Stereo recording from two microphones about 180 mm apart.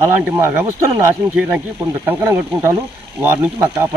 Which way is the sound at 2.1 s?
15° right (ahead or behind).